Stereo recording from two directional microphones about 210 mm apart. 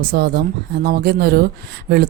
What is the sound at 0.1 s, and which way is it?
Speech, 45° right (ahead or behind).